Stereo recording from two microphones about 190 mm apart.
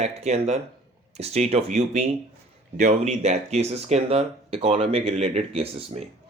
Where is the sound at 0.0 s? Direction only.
35° right (ahead or behind).